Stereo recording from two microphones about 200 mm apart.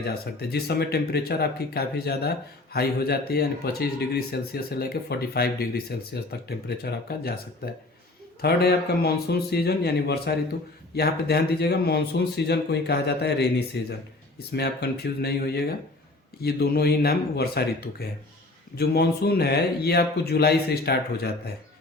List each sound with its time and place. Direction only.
0.0 s speech: 50° left (ahead or behind)